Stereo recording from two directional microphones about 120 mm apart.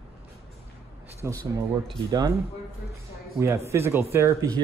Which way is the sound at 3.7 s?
20° right (ahead or behind).